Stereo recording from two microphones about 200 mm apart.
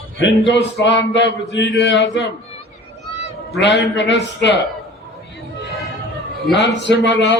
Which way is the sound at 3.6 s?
60° left (ahead or behind).